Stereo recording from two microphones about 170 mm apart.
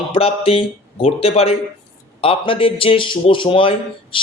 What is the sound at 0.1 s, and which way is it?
A man's voice, 35° left (ahead or behind).